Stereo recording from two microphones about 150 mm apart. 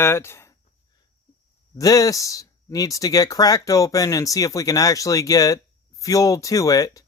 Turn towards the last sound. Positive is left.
turn(degrees=25)  # may be behind; listen again after turning